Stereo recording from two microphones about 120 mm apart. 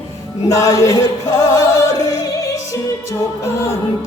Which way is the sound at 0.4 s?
25° left (ahead or behind).